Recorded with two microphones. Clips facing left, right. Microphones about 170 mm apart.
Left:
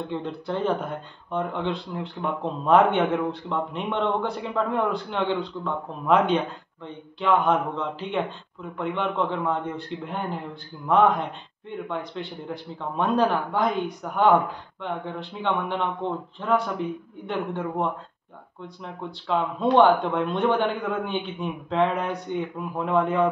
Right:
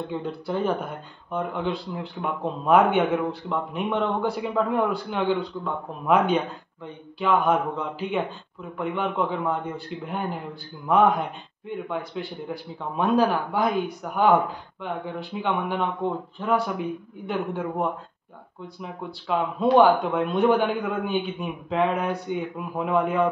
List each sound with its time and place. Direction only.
0.1 s speech: 5° right (ahead or behind)